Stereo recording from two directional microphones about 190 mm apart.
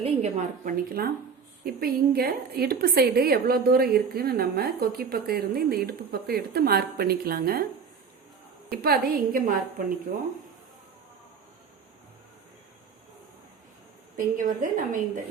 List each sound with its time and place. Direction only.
0.0 s a woman's voice: 35° right (ahead or behind); by 7.6 s 50° right (ahead or behind)
8.7 s a woman's voice: 55° right (ahead or behind)
14.2 s a woman's voice: 45° right (ahead or behind)